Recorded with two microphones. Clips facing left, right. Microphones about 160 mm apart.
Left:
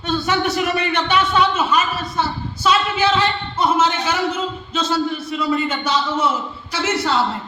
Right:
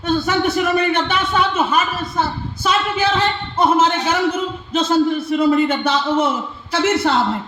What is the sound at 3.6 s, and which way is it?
Speech, 50° right (ahead or behind).